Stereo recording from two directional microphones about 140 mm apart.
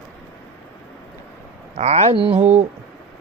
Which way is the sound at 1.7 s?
50° right (ahead or behind).